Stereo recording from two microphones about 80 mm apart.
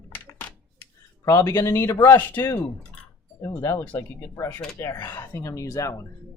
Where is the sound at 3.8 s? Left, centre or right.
Left.